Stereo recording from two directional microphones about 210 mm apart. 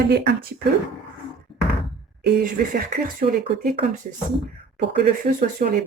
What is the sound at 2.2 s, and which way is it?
Speech, 40° right (ahead or behind).